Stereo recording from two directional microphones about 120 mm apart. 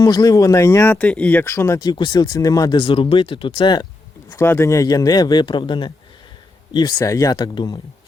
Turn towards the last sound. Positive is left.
turn(degrees=40)  # may be behind; listen again after turning